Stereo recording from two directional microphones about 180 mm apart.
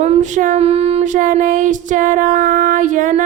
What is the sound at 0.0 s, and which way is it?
Child singing, 40° right (ahead or behind).